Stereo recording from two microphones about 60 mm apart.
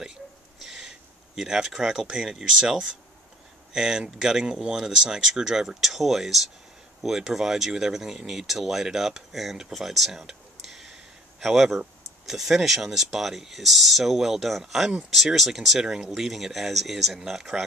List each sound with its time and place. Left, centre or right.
0.6 s speech: centre